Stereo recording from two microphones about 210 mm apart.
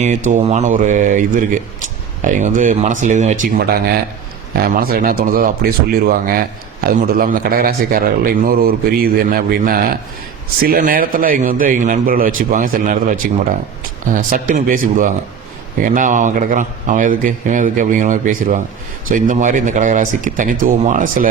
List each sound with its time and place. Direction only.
0.0 s speech: 35° right (ahead or behind)
3.7 s a man's voice: 45° right (ahead or behind)